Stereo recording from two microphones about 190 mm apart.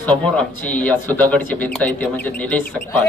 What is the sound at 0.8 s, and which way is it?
Speech, 10° left (ahead or behind).